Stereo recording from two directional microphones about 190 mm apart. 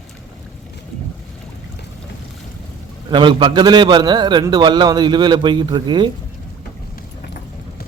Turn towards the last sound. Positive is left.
turn(degrees=-25)  # may be behind; listen again after turning